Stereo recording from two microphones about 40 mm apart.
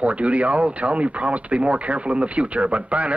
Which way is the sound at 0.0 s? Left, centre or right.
Right.